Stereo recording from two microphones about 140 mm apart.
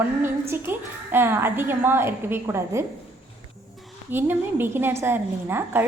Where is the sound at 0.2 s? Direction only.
15° right (ahead or behind).